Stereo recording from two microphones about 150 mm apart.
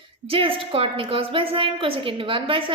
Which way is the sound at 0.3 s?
35° right (ahead or behind).